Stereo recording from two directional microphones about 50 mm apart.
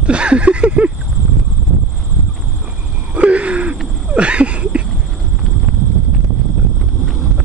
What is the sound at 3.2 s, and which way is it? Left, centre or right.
Wheeze, right.